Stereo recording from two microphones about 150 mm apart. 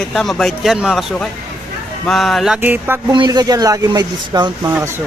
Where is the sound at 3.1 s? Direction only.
30° right (ahead or behind).